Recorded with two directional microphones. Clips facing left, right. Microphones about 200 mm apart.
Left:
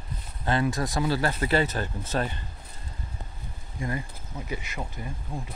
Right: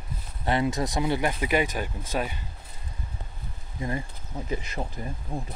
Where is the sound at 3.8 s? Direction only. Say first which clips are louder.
Right 1 dB; 25° right (ahead or behind).